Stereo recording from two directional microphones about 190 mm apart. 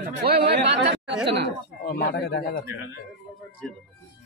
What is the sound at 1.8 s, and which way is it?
Speech, 55° left (ahead or behind).